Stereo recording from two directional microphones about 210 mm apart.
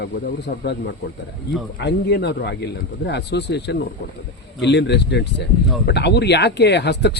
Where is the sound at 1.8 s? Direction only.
50° left (ahead or behind).